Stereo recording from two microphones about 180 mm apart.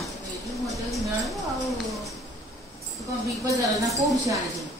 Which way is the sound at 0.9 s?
Centre (ahead or behind).